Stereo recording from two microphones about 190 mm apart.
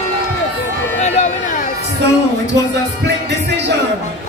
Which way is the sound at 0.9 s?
35° left (ahead or behind).